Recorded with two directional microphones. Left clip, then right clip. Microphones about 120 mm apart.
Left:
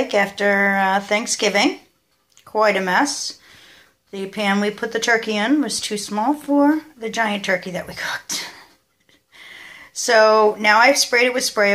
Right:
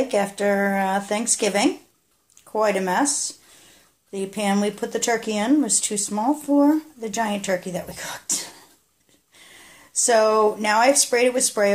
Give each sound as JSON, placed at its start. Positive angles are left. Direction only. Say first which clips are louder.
{"t": 0.1, "sound": "speech", "louder": "left 4 dB", "side_deg": -30}
{"t": 9.5, "sound": "speech", "louder": "left 6 dB", "side_deg": -45}